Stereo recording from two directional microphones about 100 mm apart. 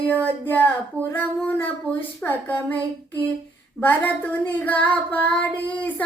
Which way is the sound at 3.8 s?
20° left (ahead or behind).